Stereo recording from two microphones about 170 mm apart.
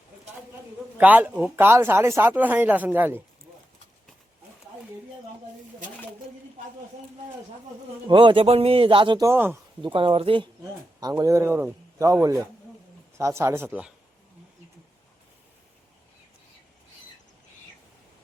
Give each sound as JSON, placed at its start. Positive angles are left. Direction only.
{"t": 0.9, "sound": "speech", "side_deg": -10}
{"t": 8.0, "sound": "speech", "side_deg": -30}
{"t": 9.2, "sound": "speech", "side_deg": -15}
{"t": 9.8, "sound": "speech", "side_deg": -30}